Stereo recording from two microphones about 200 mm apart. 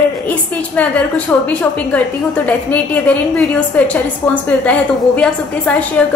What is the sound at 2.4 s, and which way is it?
A woman's voice, 10° left (ahead or behind).